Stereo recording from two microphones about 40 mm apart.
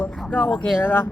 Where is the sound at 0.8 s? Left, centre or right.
Left.